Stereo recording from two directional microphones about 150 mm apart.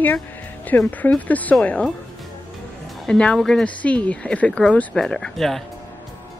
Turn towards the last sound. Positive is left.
turn(degrees=0)  # may be behind; listen again after turning